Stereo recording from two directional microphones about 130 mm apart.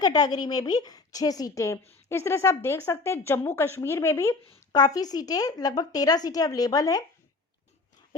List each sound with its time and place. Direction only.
0.0 s speech: 30° left (ahead or behind)
4.7 s speech: 30° left (ahead or behind)